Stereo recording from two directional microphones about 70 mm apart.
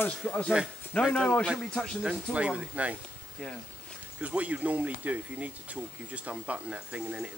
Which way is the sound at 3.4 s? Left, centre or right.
Centre.